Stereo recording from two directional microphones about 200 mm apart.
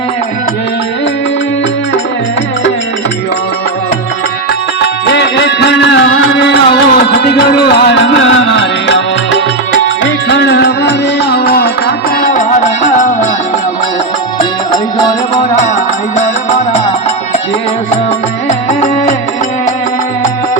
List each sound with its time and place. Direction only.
4.8 s music: 60° left (ahead or behind); by 13.1 s 35° left (ahead or behind)
18.7 s music: 35° left (ahead or behind)